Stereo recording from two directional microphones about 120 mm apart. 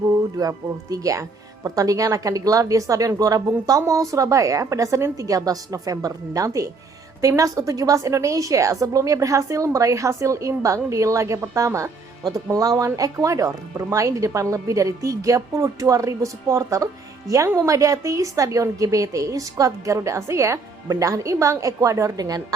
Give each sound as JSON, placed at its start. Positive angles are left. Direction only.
{"t": 0.3, "sound": "speech", "side_deg": -30}